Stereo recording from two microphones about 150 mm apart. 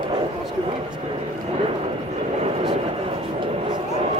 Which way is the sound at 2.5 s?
40° right (ahead or behind).